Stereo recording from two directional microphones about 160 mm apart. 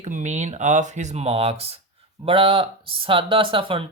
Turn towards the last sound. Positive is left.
turn(degrees=-35)  # may be behind; listen again after turning